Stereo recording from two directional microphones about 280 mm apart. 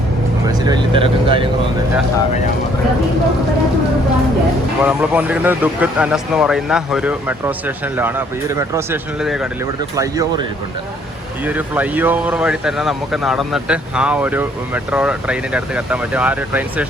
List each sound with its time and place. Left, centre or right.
0.6 s speech: centre
4.8 s speech: centre
11.4 s speech: centre